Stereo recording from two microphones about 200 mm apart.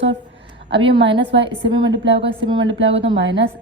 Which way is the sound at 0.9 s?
25° right (ahead or behind).